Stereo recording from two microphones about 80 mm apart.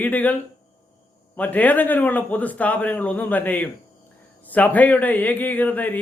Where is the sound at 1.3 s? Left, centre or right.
Left.